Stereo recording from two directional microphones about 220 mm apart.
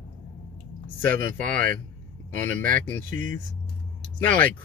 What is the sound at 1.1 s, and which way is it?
Speech, 40° right (ahead or behind).